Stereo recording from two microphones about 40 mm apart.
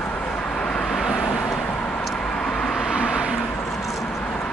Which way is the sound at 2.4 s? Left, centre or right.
Centre.